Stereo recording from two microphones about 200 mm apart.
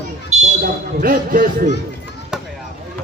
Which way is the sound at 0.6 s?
45° right (ahead or behind).